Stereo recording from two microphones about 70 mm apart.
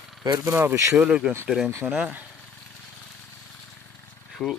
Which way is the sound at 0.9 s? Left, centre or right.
Centre.